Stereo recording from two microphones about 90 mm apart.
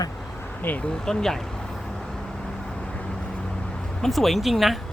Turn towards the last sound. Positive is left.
turn(degrees=0)  # may be behind; listen again after turning